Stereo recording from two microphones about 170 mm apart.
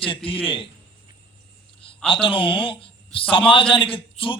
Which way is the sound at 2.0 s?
30° left (ahead or behind).